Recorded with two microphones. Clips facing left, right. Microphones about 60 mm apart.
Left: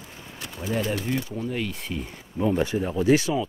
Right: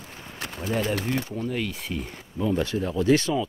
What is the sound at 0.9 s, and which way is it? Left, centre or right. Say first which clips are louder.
Speech: even; right.